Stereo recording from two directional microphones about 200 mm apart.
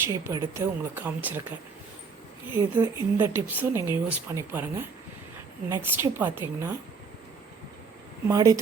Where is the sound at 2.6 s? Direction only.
15° right (ahead or behind).